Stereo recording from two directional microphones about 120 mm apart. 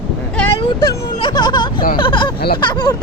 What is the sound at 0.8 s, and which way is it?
Speech, 35° left (ahead or behind).